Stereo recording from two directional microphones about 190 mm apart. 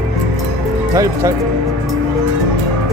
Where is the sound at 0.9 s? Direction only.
15° right (ahead or behind).